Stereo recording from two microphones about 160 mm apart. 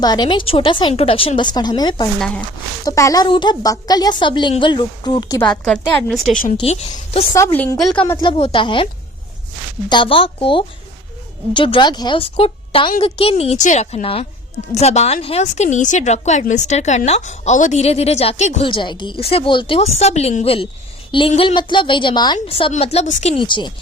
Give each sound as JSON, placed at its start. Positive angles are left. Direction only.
{"t": 0.0, "sound": "a woman's voice", "side_deg": 25}
{"t": 2.1, "sound": "a woman's voice", "side_deg": 5}
{"t": 2.8, "sound": "a woman's voice", "side_deg": 20}
{"t": 5.6, "sound": "a woman's voice", "side_deg": 5}
{"t": 6.3, "sound": "speech", "side_deg": 55}
{"t": 6.6, "sound": "a woman's voice", "side_deg": 40}
{"t": 7.3, "sound": "speech", "side_deg": 15}
{"t": 8.2, "sound": "a woman's voice", "side_deg": 35}
{"t": 9.9, "sound": "a woman's voice", "side_deg": 30}
{"t": 18.7, "sound": "a woman's voice", "side_deg": 30}
{"t": 23.4, "sound": "a woman's voice", "side_deg": 30}